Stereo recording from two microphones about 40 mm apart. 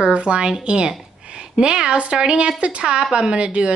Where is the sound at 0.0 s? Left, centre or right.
Right.